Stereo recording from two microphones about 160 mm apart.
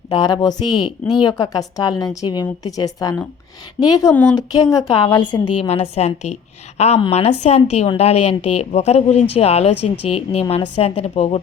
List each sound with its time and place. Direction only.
0.1 s speech: 25° left (ahead or behind)
4.1 s speech: 10° left (ahead or behind)
4.5 s speech: 20° left (ahead or behind)
5.6 s a woman's voice: 40° left (ahead or behind)